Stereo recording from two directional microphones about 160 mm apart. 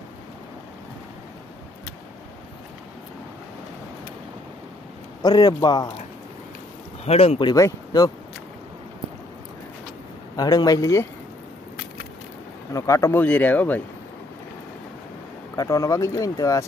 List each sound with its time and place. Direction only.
5.2 s speech: 25° left (ahead or behind)
7.1 s speech: 35° left (ahead or behind); by 8.1 s 20° left (ahead or behind)
10.3 s speech: 25° left (ahead or behind)
12.7 s speech: 20° left (ahead or behind)
15.5 s speech: 20° left (ahead or behind)